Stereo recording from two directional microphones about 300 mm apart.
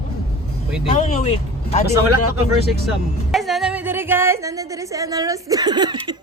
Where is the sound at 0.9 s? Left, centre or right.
Left.